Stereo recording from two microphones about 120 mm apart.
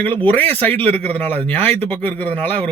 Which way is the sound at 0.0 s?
15° left (ahead or behind).